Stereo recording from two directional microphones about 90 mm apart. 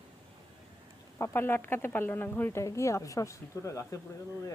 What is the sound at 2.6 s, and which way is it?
A woman's voice, 35° left (ahead or behind).